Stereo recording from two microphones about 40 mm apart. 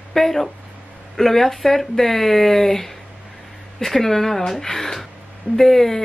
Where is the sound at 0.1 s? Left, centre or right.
Centre.